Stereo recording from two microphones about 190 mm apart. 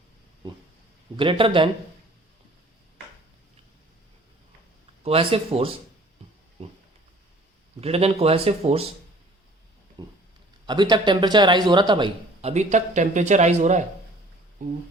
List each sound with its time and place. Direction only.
1.1 s a man's voice: 25° right (ahead or behind)
5.0 s a man's voice: 30° right (ahead or behind)
7.8 s speech: 30° right (ahead or behind)
10.0 s a sound: 25° right (ahead or behind)
10.7 s a man's voice: 25° right (ahead or behind); by 13.8 s 40° right (ahead or behind)
14.6 s a sound: 45° right (ahead or behind)